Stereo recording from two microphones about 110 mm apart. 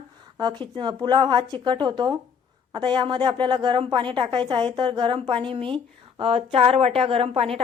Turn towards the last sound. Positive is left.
turn(degrees=-60)  # may be behind; listen again after turning